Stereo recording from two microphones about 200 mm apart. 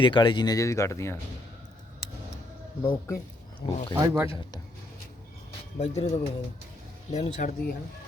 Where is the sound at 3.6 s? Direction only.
20° left (ahead or behind).